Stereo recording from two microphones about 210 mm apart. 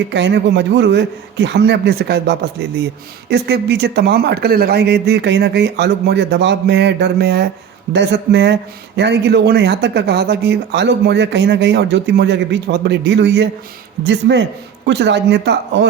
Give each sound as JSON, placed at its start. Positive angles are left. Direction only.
{"t": 0.1, "sound": "a man's voice", "side_deg": -55}